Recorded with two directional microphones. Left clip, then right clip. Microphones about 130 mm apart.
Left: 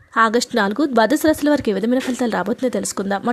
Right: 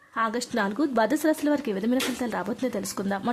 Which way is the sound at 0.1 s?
55° left (ahead or behind).